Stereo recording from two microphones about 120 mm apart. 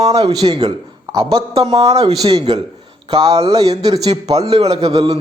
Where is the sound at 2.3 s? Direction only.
55° right (ahead or behind).